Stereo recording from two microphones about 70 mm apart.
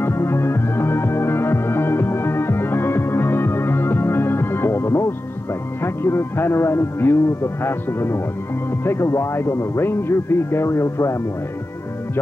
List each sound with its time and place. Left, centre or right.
0.0 s music: left
5.8 s speech: left